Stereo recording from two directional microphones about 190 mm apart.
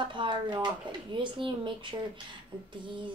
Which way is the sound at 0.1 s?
25° right (ahead or behind).